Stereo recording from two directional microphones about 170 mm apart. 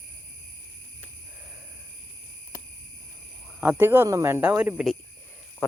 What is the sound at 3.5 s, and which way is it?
Speech, 10° right (ahead or behind).